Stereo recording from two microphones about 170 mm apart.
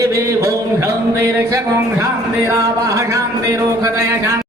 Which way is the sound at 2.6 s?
15° right (ahead or behind).